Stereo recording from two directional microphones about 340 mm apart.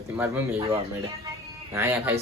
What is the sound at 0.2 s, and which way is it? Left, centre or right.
Speech, centre.